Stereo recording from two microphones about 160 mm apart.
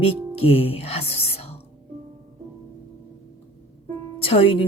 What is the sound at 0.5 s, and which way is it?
Speech, 40° left (ahead or behind).